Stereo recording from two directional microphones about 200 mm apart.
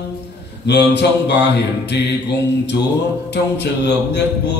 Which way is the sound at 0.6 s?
60° left (ahead or behind).